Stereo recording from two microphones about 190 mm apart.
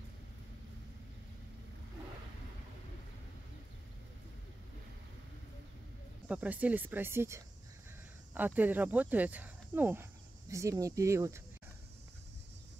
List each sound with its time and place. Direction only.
6.2 s speech: 5° right (ahead or behind)